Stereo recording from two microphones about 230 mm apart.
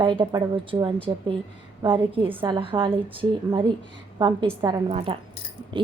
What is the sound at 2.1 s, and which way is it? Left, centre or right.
A woman's voice, right.